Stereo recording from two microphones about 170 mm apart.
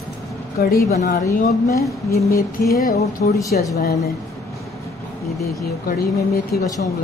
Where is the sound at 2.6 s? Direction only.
65° left (ahead or behind).